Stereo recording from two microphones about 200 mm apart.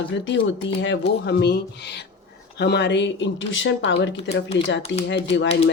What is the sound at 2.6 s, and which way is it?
Speech, 55° left (ahead or behind).